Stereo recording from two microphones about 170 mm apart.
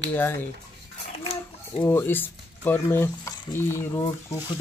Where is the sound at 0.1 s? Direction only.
10° left (ahead or behind).